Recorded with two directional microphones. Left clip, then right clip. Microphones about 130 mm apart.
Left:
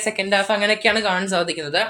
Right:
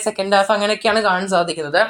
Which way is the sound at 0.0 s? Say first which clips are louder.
Right 4 dB; 20° right (ahead or behind).